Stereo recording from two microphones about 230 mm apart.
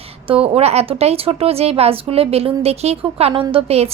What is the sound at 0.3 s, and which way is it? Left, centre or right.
A woman's voice, right.